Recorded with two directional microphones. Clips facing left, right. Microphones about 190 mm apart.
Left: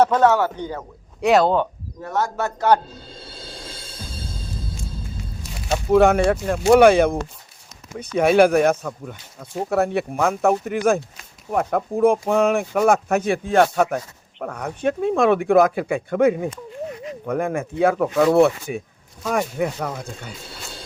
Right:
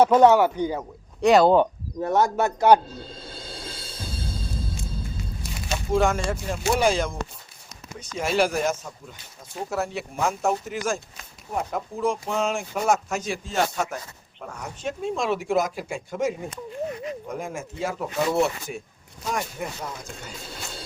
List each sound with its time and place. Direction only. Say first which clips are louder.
0.0 s speech: right 1 dB; 15° right (ahead or behind)
1.2 s speech: even; centre (ahead or behind)
2.0 s speech: right 2 dB; 20° right (ahead or behind)
5.9 s speech: left 8 dB; 60° left (ahead or behind)